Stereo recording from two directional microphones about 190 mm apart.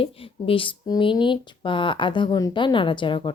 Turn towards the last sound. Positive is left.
turn(degrees=25)  # may be behind; listen again after turning